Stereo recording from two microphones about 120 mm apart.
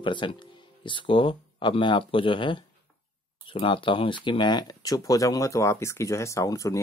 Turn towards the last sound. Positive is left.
turn(degrees=25)  # may be behind; listen again after turning